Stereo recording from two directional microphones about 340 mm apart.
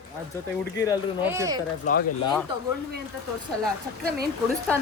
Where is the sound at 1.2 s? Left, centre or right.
Centre.